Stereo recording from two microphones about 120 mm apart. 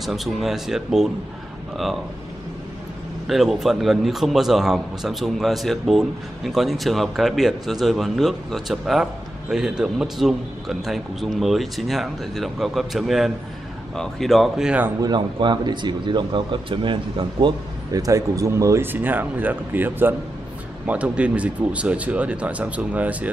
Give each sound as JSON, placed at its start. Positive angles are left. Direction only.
{"t": 0.0, "sound": "a man's voice", "side_deg": 0}
{"t": 3.3, "sound": "a man's voice", "side_deg": 0}
{"t": 15.0, "sound": "speech", "side_deg": -35}